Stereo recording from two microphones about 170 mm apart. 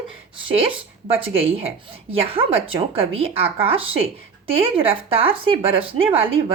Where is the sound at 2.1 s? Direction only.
35° right (ahead or behind).